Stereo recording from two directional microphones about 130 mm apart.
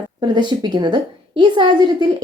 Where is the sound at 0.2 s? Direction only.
35° right (ahead or behind).